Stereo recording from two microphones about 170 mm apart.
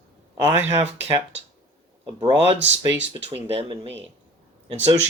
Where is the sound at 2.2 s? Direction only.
30° right (ahead or behind).